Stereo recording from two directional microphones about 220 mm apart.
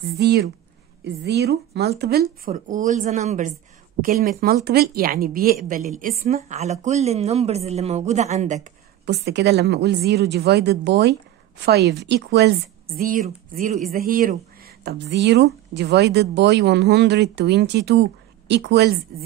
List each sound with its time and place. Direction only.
0.1 s a woman's voice: 50° right (ahead or behind); by 8.6 s 30° right (ahead or behind)
9.0 s a woman's voice: 50° right (ahead or behind)